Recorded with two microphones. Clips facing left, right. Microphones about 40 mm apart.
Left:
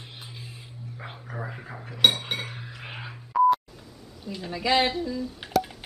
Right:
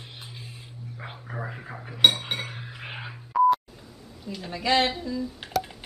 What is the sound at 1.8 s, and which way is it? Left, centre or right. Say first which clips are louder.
Cutlery: right 1 dB; centre.